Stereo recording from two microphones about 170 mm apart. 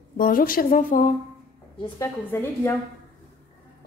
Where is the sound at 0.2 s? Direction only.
55° left (ahead or behind).